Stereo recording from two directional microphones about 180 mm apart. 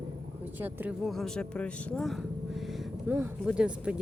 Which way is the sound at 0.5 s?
10° right (ahead or behind).